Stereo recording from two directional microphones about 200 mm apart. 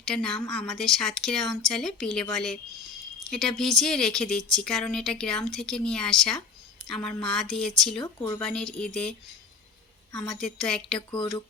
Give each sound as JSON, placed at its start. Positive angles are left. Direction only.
{"t": 0.0, "sound": "a woman's voice", "side_deg": 5}
{"t": 8.0, "sound": "a woman's voice", "side_deg": 15}
{"t": 8.4, "sound": "speech", "side_deg": 5}
{"t": 10.2, "sound": "speech", "side_deg": 0}
{"t": 11.1, "sound": "speech", "side_deg": 20}